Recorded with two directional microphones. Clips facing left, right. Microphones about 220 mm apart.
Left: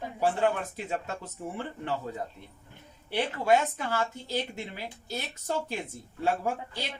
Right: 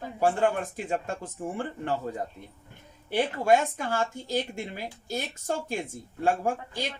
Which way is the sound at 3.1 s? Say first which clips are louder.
Right 2 dB; 45° right (ahead or behind).